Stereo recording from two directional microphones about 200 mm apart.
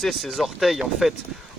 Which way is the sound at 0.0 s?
Centre (ahead or behind).